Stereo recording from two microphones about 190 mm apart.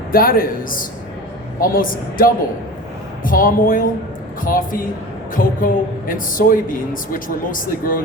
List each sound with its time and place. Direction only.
0.1 s a woman's voice: 50° left (ahead or behind)